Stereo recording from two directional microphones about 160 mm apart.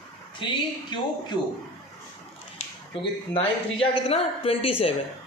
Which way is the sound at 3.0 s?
30° left (ahead or behind).